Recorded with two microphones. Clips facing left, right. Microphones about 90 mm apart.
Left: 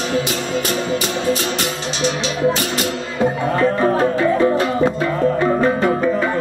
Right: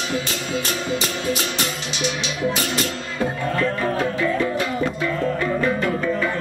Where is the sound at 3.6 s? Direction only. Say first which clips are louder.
Left 7 dB; 30° left (ahead or behind).